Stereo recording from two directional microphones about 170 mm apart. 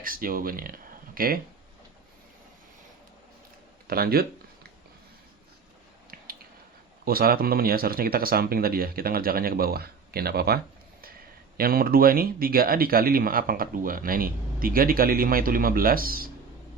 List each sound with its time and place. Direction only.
0.0 s speech: 55° right (ahead or behind)
3.8 s speech: 65° right (ahead or behind)
7.0 s speech: 60° right (ahead or behind)